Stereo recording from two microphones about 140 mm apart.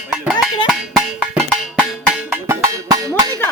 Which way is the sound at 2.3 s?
20° right (ahead or behind).